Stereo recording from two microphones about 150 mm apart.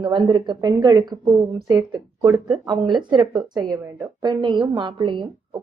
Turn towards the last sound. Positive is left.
turn(degrees=-35)  # may be behind; listen again after turning